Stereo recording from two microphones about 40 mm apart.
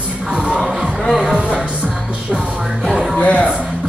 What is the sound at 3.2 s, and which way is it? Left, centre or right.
Music, left.